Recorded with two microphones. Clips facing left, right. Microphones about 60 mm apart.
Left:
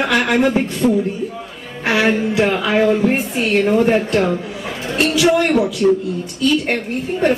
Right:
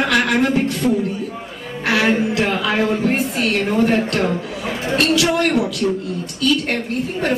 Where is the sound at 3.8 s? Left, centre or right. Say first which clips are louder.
Left 2 dB; centre.